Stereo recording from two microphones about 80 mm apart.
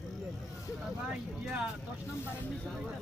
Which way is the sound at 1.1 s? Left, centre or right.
Centre.